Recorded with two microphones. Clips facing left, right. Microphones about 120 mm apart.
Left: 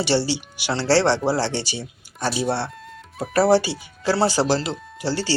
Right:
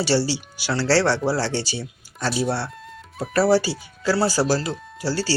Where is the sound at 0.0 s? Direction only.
20° left (ahead or behind).